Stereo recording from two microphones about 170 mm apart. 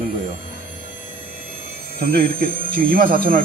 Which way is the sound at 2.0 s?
60° right (ahead or behind).